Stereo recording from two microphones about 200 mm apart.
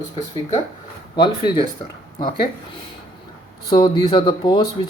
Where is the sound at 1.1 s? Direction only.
25° left (ahead or behind).